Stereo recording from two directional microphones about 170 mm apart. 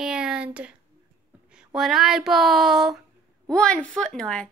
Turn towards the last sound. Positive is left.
turn(degrees=5)  # may be behind; listen again after turning